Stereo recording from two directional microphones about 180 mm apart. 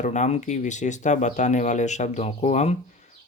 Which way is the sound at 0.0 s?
40° left (ahead or behind).